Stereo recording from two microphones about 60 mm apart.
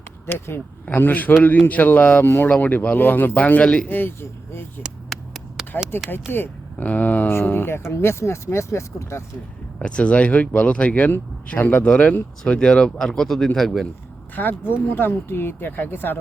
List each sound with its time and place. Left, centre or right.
0.3 s speech: left
2.2 s speech: left; by 3.8 s centre
3.8 s speech: left
5.0 s a sound: centre
5.9 s speech: left
6.3 s a sound: left
6.8 s speech: left
7.3 s speech: left
9.8 s speech: centre
11.9 s speech: centre
14.3 s speech: left